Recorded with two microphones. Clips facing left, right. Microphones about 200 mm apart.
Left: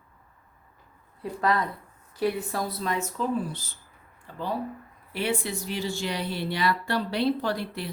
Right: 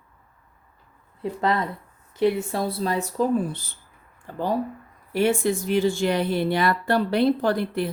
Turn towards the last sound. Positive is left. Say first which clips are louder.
# right 7 dB
turn(degrees=-50)  # may be behind; listen again after turning